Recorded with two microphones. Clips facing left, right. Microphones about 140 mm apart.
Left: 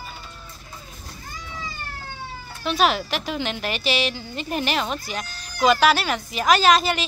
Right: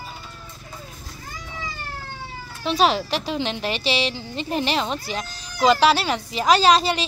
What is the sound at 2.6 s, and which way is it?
A woman's voice, 30° right (ahead or behind).